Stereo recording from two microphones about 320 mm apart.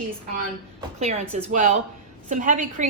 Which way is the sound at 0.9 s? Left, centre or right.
Centre.